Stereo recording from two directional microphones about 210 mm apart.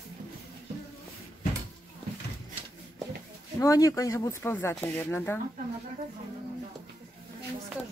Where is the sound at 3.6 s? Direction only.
15° left (ahead or behind).